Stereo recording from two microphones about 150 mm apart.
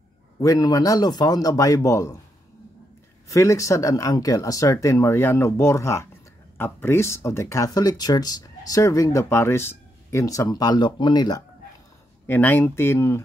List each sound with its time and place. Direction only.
0.4 s speech: 25° left (ahead or behind)
3.3 s speech: 20° left (ahead or behind)
12.3 s speech: 10° left (ahead or behind)